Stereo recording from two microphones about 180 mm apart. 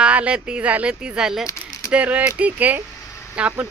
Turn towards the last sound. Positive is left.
turn(degrees=-10)  # may be behind; listen again after turning